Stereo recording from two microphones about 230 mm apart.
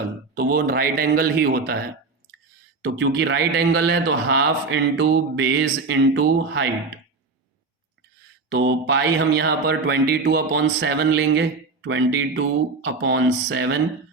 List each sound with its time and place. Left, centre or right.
0.3 s a man's voice: right
2.8 s mantra: right
8.4 s mantra: right